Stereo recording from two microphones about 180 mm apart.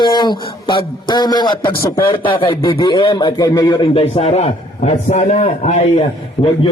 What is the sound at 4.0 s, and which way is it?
A man's voice, 35° left (ahead or behind).